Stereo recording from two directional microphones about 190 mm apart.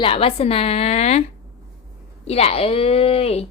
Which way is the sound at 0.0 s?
30° left (ahead or behind).